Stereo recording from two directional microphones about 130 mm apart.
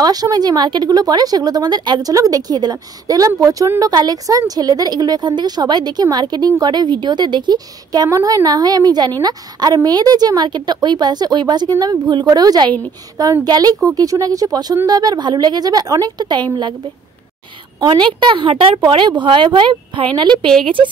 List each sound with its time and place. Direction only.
0.0 s a woman's voice: 30° right (ahead or behind)
17.8 s a woman's voice: 35° right (ahead or behind)